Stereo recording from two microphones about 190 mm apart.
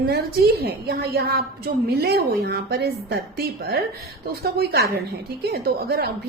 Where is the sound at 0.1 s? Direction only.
55° right (ahead or behind).